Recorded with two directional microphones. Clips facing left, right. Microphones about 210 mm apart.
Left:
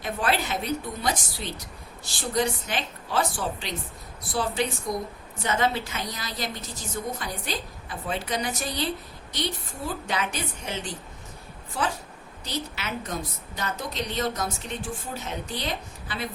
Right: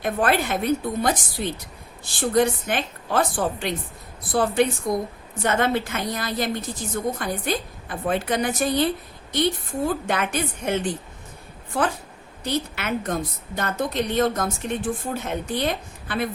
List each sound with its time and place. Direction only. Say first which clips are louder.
0.0 s a woman's voice: right 5 dB; 55° right (ahead or behind)
12.5 s a woman's voice: right 7 dB; 55° right (ahead or behind)